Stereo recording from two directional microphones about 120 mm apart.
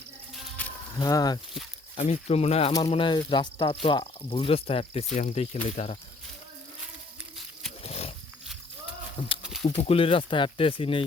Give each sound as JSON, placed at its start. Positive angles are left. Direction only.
{"t": 0.9, "sound": "speech", "side_deg": 30}
{"t": 2.0, "sound": "speech", "side_deg": 65}
{"t": 3.1, "sound": "speech", "side_deg": 40}
{"t": 5.1, "sound": "speech", "side_deg": 75}
{"t": 5.6, "sound": "speech", "side_deg": 60}
{"t": 7.8, "sound": "wild animals", "side_deg": 55}
{"t": 9.4, "sound": "snake", "side_deg": -5}
{"t": 9.6, "sound": "speech", "side_deg": 55}